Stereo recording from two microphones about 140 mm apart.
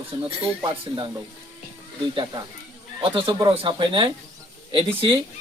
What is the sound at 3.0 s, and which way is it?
Speech, 35° right (ahead or behind).